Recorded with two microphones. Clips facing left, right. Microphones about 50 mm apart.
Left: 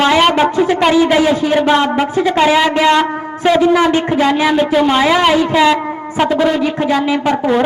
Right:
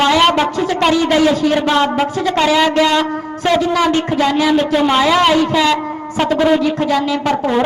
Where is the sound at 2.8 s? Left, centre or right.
Left.